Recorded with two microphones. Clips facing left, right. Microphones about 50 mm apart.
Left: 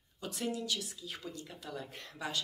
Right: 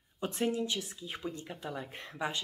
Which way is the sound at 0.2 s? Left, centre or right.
Right.